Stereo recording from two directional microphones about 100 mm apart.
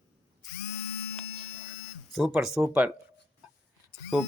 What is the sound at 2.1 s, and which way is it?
Speech, centre (ahead or behind).